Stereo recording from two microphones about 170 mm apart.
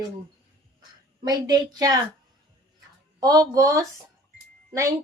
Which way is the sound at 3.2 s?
20° right (ahead or behind).